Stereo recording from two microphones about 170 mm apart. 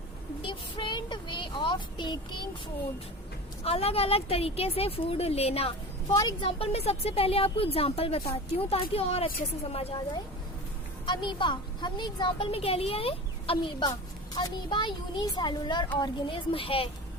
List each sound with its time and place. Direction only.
0.4 s a woman's voice: 30° left (ahead or behind)
3.6 s a woman's voice: 35° left (ahead or behind)
11.0 s a woman's voice: 25° left (ahead or behind)